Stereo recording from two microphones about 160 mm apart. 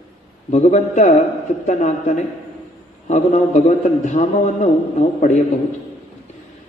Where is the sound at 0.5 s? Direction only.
50° left (ahead or behind).